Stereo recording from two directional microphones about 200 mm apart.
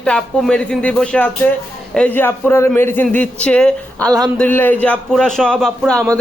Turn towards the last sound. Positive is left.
turn(degrees=5)  # may be behind; listen again after turning